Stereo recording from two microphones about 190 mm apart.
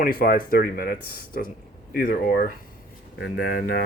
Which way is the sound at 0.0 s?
50° left (ahead or behind).